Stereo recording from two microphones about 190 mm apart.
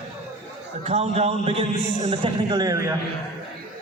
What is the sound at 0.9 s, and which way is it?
A man's voice, 35° right (ahead or behind).